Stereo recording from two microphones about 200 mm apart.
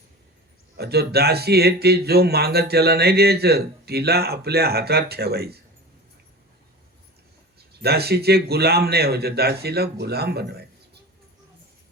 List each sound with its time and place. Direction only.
0.8 s speech: 55° right (ahead or behind)
7.7 s speech: 55° right (ahead or behind)